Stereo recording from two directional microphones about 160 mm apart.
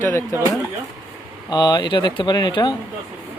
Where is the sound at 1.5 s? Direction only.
25° left (ahead or behind).